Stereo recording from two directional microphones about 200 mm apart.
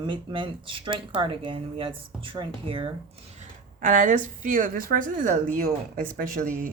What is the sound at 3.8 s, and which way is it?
A woman's voice, 40° right (ahead or behind).